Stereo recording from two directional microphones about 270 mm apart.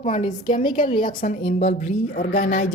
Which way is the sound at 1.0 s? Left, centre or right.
Left.